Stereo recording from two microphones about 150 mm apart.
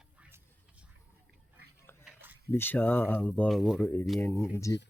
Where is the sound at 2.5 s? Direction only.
15° left (ahead or behind).